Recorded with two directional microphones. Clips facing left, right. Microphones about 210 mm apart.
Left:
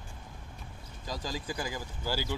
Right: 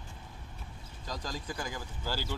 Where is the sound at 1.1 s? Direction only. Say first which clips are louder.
Left 2 dB; 5° left (ahead or behind).